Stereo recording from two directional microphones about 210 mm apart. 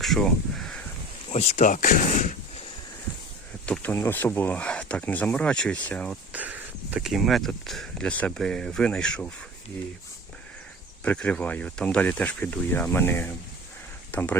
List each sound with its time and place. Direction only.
0.0 s a sound: centre (ahead or behind)
1.3 s speech: 30° left (ahead or behind)
3.7 s speech: 10° left (ahead or behind)
6.3 s speech: 5° right (ahead or behind)
11.0 s speech: 5° left (ahead or behind)